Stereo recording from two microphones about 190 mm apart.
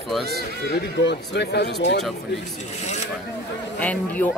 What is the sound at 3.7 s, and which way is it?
Speech, 10° left (ahead or behind).